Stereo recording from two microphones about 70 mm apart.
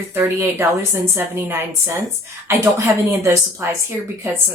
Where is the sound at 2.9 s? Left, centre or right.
Right.